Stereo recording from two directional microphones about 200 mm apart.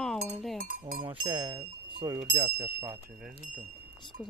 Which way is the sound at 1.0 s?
25° right (ahead or behind).